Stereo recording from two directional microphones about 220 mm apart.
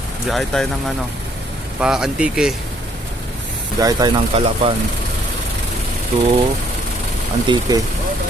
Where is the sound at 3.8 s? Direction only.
15° right (ahead or behind).